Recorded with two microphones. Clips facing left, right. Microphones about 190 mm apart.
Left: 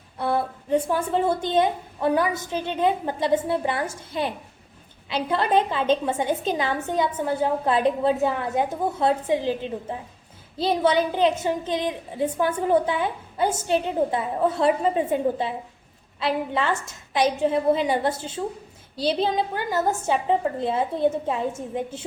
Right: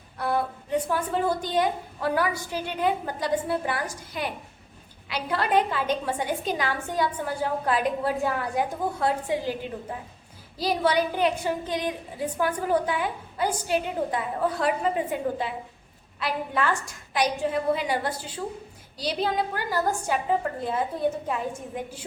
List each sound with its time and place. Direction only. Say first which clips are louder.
0.2 s a woman's voice: left 2 dB; 25° left (ahead or behind)